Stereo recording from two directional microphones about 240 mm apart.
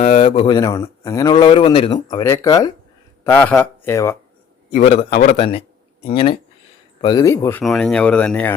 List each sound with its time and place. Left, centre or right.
0.0 s a man's voice: left; by 4.2 s centre
4.7 s a man's voice: left
5.4 s speech: left
7.6 s speech: centre